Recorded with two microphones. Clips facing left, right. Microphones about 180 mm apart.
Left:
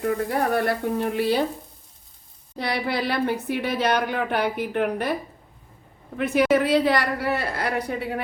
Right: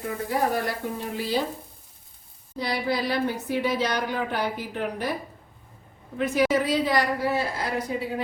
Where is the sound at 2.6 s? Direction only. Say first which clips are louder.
Left 1 dB; 65° left (ahead or behind).